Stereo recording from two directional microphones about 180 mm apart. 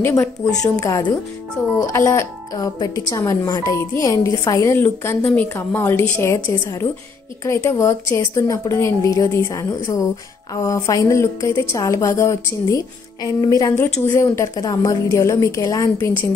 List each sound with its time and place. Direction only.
0.0 s a woman's voice: 15° left (ahead or behind)
7.4 s speech: 15° left (ahead or behind)